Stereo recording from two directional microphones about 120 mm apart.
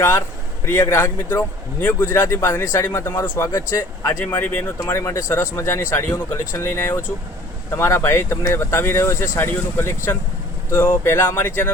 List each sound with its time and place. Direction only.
0.0 s speech: 20° left (ahead or behind)